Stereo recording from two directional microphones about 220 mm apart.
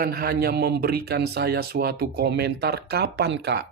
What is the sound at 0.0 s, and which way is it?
Speech, 45° right (ahead or behind).